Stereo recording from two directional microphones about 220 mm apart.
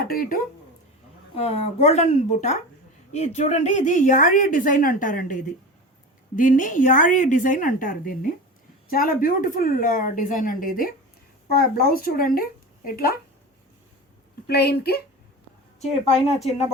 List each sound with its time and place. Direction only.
0.0 s speech: 40° left (ahead or behind)
1.4 s speech: 30° left (ahead or behind)
14.4 s speech: 45° left (ahead or behind)
16.4 s speech: 30° left (ahead or behind)